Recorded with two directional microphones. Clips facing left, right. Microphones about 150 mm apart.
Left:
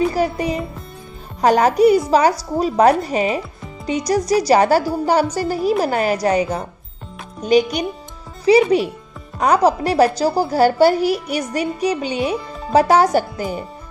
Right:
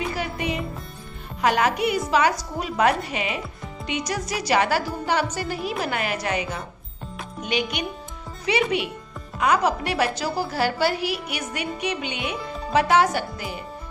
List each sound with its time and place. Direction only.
0.1 s a woman's voice: 40° left (ahead or behind)